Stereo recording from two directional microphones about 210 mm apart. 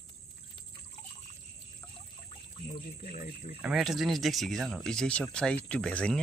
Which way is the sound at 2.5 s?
25° left (ahead or behind).